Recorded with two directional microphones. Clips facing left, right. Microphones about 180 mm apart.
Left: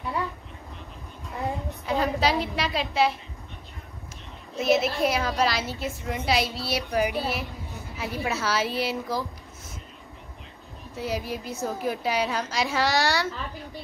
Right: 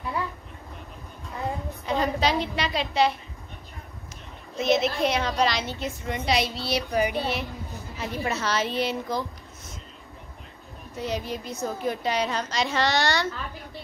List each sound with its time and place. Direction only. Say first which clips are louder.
1.3 s a sound: left 1 dB; centre (ahead or behind)
4.6 s a woman's voice: even; 5° left (ahead or behind)
11.0 s a woman's voice: even; 5° left (ahead or behind)